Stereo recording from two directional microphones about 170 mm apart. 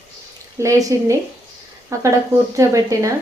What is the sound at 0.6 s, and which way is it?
A woman's voice, 20° right (ahead or behind).